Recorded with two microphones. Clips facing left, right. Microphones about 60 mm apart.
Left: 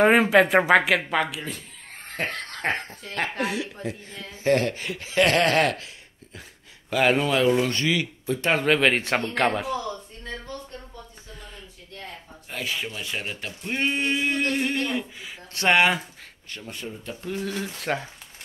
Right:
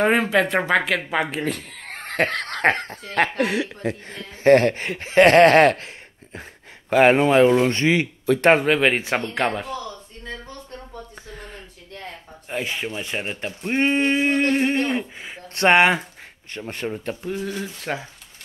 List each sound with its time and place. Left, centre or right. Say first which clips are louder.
0.0 s speech: left 2 dB; centre
1.4 s speech: right 9 dB; right
3.8 s speech: right 5 dB; right
8.6 s speech: right 2 dB; centre
11.3 s a sound: right 5 dB; right
12.4 s speech: right 4 dB; right
16.6 s speech: right 8 dB; right
17.2 s speech: right 2 dB; centre